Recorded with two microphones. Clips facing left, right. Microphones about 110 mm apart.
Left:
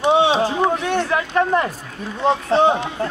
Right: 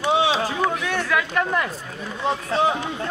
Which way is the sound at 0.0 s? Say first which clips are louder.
Left 5 dB; 25° left (ahead or behind).